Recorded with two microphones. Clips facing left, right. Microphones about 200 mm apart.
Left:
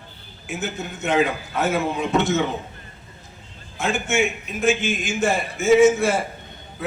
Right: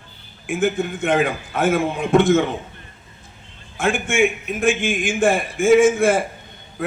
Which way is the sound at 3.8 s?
50° right (ahead or behind).